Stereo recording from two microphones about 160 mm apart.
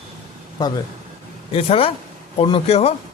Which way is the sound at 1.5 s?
35° left (ahead or behind).